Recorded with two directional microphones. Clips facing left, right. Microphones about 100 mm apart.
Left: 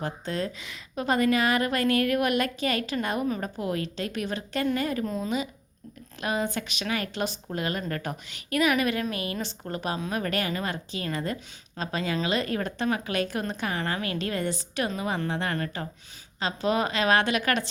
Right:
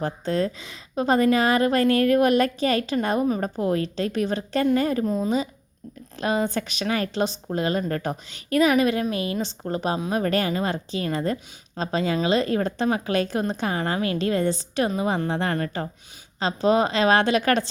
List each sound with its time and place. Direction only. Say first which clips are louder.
0.0 s a woman's voice: right 6 dB; 35° right (ahead or behind)
5.0 s speech: right 6 dB; 20° right (ahead or behind)
6.1 s a woman's voice: right 5 dB; 30° right (ahead or behind)